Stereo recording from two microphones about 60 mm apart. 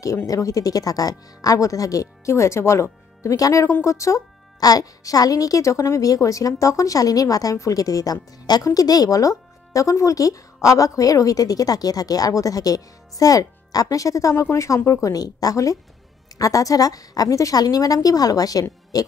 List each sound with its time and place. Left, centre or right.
0.3 s speech: left
3.3 s speech: left
3.8 s speech: left
7.5 s speech: left
14.3 s a woman's voice: left